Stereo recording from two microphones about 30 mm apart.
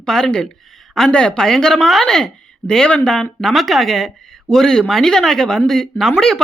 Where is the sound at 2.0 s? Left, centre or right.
Left.